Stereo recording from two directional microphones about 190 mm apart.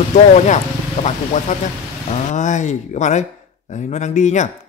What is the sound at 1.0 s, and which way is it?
A man's voice, 35° left (ahead or behind).